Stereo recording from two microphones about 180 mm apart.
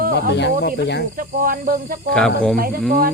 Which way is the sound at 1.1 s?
50° right (ahead or behind).